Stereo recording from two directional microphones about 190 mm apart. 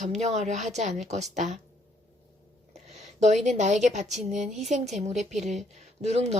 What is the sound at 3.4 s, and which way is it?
A woman's voice, 40° right (ahead or behind).